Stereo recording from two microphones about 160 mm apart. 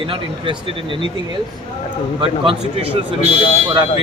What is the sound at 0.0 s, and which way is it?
Speech, 30° right (ahead or behind).